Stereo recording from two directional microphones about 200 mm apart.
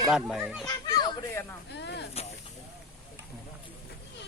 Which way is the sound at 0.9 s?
20° left (ahead or behind).